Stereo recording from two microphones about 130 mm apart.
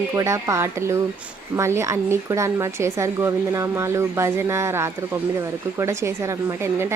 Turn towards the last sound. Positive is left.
turn(degrees=-20)  # may be behind; listen again after turning